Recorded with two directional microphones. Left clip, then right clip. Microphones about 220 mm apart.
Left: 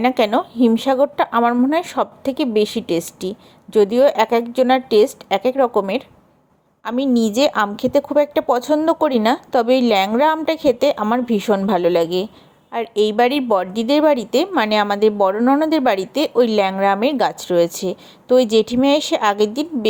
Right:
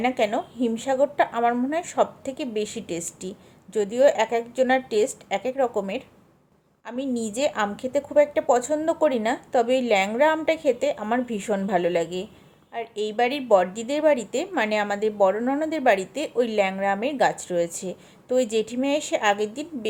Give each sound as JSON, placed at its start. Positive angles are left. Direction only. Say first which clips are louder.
{"t": 0.0, "sound": "a woman's voice", "louder": "left 7 dB", "side_deg": 25}